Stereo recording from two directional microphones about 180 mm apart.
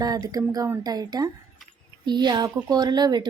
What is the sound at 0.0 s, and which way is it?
A woman's voice, 20° right (ahead or behind).